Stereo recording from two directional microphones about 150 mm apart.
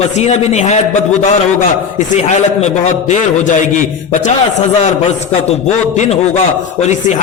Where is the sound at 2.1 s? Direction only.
50° left (ahead or behind).